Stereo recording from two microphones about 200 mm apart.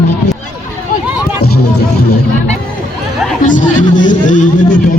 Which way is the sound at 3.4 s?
40° left (ahead or behind).